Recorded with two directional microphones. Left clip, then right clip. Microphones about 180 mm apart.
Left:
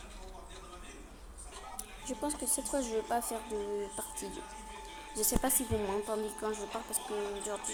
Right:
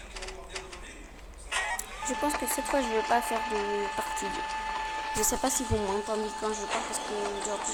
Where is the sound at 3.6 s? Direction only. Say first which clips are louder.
Right 8 dB; 45° right (ahead or behind).